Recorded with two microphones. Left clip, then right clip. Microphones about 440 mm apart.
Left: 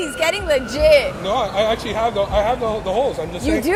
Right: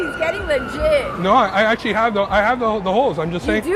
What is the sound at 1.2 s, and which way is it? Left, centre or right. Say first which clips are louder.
Speech: right 4 dB; right.